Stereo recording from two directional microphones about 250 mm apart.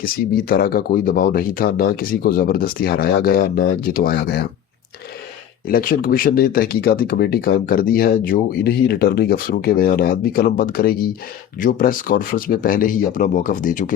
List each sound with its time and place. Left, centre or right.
0.0 s speech: left
5.6 s speech: left